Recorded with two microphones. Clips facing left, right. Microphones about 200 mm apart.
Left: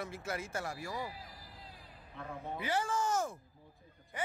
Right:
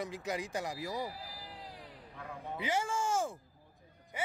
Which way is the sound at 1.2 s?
75° right (ahead or behind).